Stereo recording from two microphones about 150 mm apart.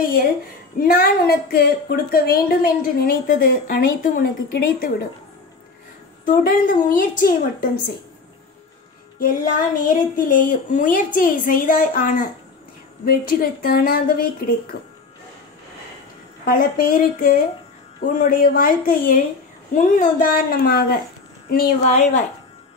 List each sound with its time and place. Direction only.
0.0 s a woman's voice: 80° left
6.2 s a woman's voice: 70° left (ahead or behind)
9.2 s a woman's voice: 65° left (ahead or behind); by 14.8 s 85° left
16.4 s a woman's voice: 75° left (ahead or behind)